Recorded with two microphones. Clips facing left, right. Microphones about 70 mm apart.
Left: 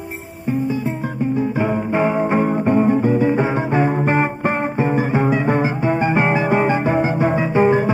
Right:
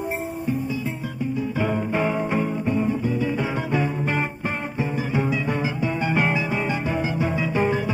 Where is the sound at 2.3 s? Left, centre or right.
Left.